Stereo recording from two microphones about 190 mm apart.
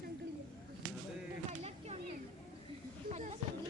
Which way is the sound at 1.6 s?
35° right (ahead or behind).